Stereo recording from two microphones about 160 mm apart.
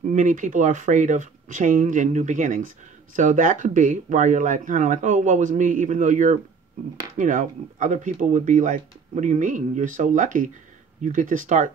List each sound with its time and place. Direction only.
0.0 s speech: 50° right (ahead or behind)